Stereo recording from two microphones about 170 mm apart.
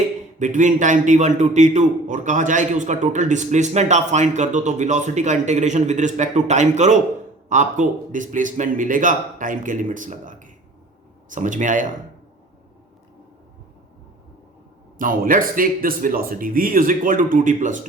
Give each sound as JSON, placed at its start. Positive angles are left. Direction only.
{"t": 0.3, "sound": "a man's voice", "side_deg": -45}
{"t": 14.9, "sound": "speech", "side_deg": -55}